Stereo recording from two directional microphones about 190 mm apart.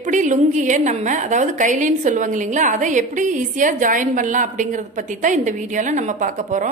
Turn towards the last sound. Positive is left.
turn(degrees=-40)  # may be behind; listen again after turning